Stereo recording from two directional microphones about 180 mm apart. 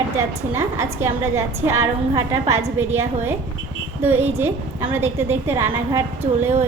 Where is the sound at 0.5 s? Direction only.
15° right (ahead or behind).